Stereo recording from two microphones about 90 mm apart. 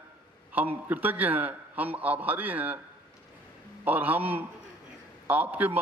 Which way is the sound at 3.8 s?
20° right (ahead or behind).